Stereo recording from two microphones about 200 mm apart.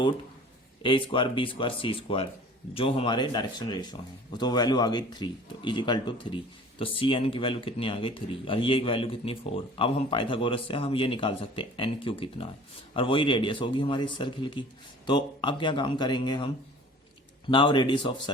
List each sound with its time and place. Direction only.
0.8 s speech: 25° left (ahead or behind)
17.5 s speech: 25° left (ahead or behind)